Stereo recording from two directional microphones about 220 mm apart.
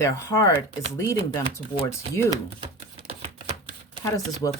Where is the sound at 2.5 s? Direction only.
25° right (ahead or behind).